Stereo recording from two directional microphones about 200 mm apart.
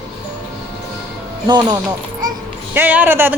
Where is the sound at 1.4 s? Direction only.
20° right (ahead or behind).